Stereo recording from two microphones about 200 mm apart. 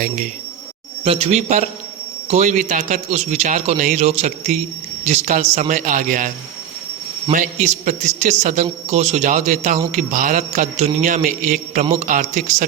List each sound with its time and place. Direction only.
1.0 s a man's voice: 30° right (ahead or behind)